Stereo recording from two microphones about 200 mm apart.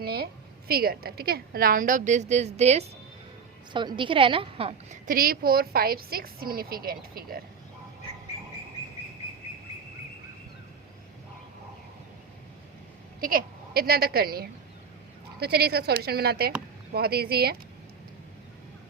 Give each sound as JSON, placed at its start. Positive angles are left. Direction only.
{"t": 0.0, "sound": "a woman's voice", "side_deg": -50}
{"t": 3.7, "sound": "a woman's voice", "side_deg": -25}
{"t": 5.0, "sound": "a woman's voice", "side_deg": -45}
{"t": 13.1, "sound": "a woman's voice", "side_deg": -45}